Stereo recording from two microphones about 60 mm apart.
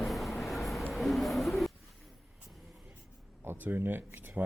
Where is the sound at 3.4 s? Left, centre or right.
Right.